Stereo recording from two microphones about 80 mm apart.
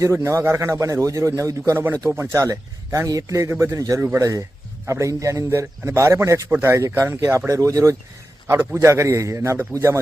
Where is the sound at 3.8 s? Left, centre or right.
Right.